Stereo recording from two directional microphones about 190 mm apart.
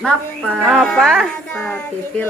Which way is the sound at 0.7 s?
Centre (ahead or behind).